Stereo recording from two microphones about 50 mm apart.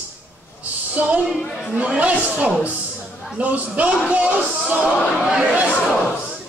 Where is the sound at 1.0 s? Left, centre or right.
Right.